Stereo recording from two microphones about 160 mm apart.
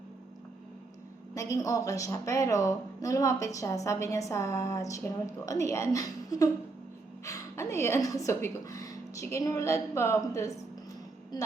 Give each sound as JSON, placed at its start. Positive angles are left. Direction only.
{"t": 1.3, "sound": "a woman's voice", "side_deg": 20}